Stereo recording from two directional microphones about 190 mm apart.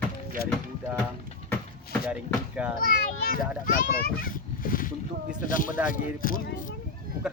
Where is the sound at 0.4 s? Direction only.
55° left (ahead or behind).